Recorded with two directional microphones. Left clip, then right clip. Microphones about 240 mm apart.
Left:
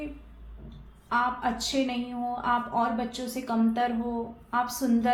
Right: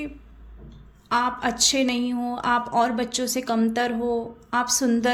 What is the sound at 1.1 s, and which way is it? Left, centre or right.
A woman's voice, right.